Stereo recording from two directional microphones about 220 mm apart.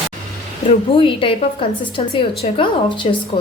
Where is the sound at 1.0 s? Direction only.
25° left (ahead or behind).